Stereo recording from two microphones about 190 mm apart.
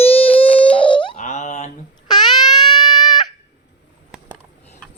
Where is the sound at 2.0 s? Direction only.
20° left (ahead or behind).